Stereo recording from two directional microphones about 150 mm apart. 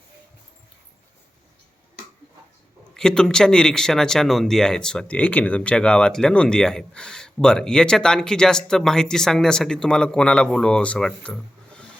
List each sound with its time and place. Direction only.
2.9 s speech: 5° left (ahead or behind)